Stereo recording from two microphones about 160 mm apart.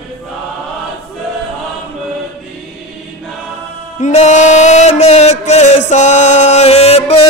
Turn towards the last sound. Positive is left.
turn(degrees=40)  # may be behind; listen again after turning